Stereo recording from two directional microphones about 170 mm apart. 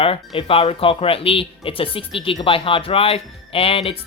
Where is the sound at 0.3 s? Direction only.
35° left (ahead or behind).